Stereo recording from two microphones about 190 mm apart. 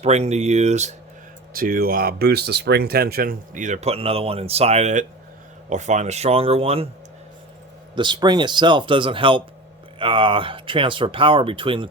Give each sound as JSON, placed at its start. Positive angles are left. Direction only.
{"t": 0.0, "sound": "speech", "side_deg": -35}
{"t": 1.5, "sound": "speech", "side_deg": -50}
{"t": 7.9, "sound": "speech", "side_deg": -25}